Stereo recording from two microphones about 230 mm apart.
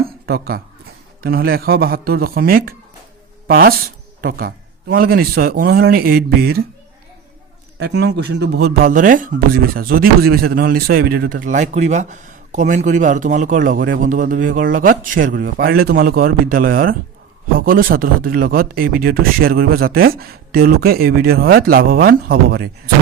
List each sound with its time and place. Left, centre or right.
0.3 s speech: right
7.8 s speech: right